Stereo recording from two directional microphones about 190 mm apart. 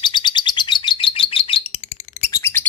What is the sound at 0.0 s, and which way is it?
Bird, 25° left (ahead or behind).